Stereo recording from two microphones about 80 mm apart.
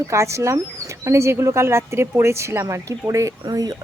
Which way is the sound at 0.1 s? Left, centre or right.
Right.